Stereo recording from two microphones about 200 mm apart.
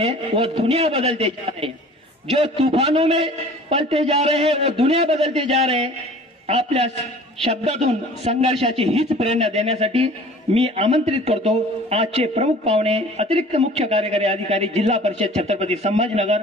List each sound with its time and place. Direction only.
0.0 s a man's voice: 30° right (ahead or behind)